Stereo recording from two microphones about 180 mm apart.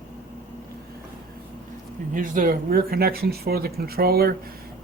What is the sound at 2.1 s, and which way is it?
Speech, 50° right (ahead or behind).